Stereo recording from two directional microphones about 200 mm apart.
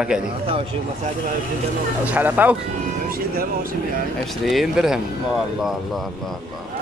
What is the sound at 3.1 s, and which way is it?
Speech, 45° right (ahead or behind).